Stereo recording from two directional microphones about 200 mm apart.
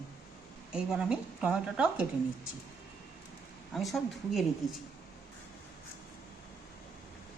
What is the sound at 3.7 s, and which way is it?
Speech, centre (ahead or behind).